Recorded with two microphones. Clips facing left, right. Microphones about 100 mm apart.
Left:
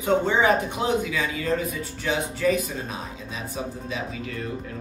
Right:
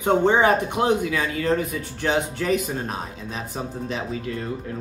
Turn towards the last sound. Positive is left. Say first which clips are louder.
# right 2 dB
turn(degrees=-55)  # may be behind; listen again after turning